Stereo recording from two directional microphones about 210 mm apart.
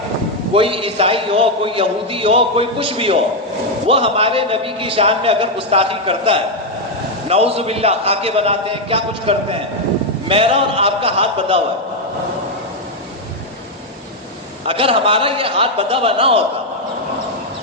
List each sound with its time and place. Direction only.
0.5 s a man's voice: 25° right (ahead or behind)
14.7 s a man's voice: 25° right (ahead or behind)